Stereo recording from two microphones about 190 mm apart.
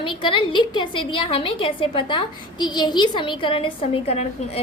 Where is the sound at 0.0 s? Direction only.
25° left (ahead or behind).